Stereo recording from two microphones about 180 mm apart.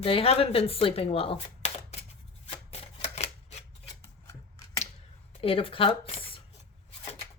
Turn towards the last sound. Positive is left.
turn(degrees=30)  # may be behind; listen again after turning